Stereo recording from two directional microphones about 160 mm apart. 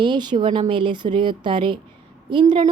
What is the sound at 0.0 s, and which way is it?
A woman's voice, 30° right (ahead or behind).